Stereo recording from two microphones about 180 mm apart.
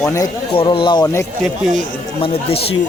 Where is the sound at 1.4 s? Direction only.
Centre (ahead or behind).